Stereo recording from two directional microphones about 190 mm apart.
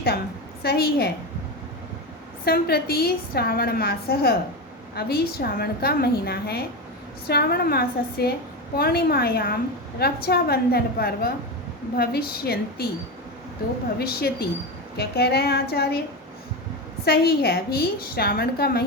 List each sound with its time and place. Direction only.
0.6 s a woman's voice: 55° left (ahead or behind)
2.4 s a woman's voice: 55° left (ahead or behind)
14.0 s a woman's voice: 55° left (ahead or behind)
17.1 s a woman's voice: 55° left (ahead or behind)